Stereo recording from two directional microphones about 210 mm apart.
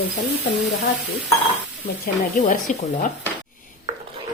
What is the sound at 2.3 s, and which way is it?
Speech, 40° left (ahead or behind).